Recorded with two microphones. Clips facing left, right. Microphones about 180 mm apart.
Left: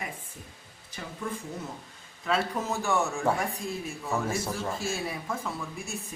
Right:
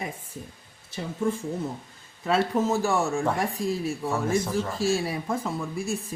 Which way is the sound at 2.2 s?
30° right (ahead or behind).